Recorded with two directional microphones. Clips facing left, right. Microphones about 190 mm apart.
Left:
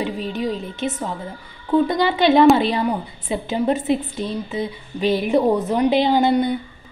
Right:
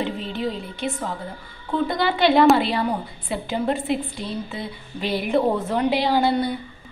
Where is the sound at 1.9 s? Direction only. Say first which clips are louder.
Left 3 dB; 20° left (ahead or behind).